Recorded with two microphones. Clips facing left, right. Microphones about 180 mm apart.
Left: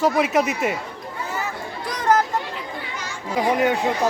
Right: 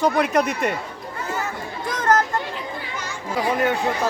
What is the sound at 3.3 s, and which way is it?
Speech, 20° left (ahead or behind).